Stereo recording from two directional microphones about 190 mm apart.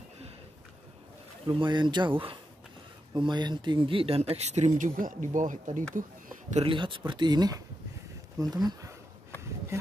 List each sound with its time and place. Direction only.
1.5 s speech: 25° right (ahead or behind); by 5.9 s 40° right (ahead or behind)
6.5 s speech: 25° right (ahead or behind)